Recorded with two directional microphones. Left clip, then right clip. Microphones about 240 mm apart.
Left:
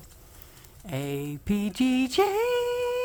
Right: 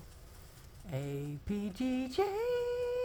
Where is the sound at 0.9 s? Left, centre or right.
Left.